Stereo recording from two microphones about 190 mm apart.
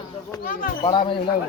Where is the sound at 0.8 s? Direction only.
25° left (ahead or behind).